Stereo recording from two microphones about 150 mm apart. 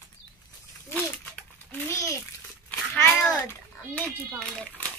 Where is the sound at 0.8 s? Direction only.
10° left (ahead or behind).